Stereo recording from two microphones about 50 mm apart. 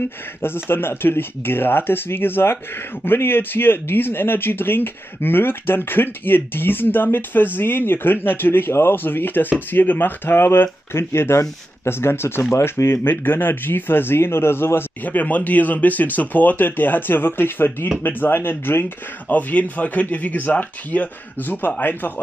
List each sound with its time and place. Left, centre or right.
0.7 s speech: left
15.0 s speech: left
19.3 s speech: left